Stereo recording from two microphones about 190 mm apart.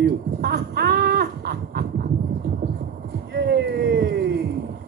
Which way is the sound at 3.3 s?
60° right (ahead or behind).